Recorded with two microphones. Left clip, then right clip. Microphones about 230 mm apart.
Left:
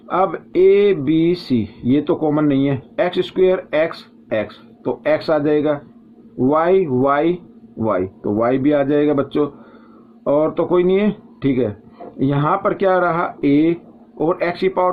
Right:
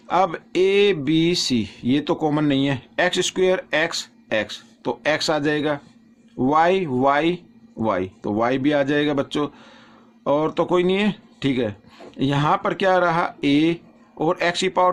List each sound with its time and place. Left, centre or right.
0.1 s speech: right